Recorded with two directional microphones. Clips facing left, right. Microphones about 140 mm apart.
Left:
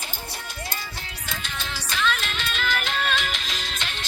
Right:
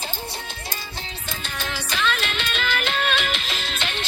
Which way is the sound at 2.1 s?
85° right.